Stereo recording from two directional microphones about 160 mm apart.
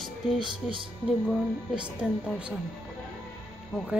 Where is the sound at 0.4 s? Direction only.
30° right (ahead or behind).